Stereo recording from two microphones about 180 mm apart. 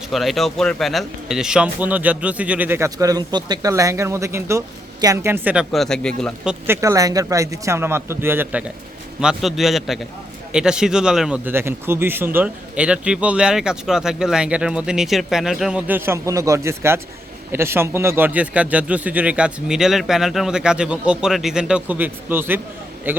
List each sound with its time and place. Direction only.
0.1 s speech: centre (ahead or behind)
6.8 s a man's voice: 20° right (ahead or behind)